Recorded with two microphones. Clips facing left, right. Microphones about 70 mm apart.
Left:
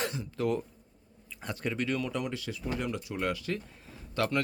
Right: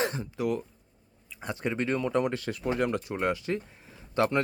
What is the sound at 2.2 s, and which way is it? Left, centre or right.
Speech, right.